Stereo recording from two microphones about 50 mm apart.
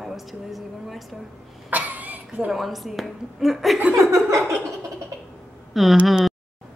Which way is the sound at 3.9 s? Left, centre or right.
Right.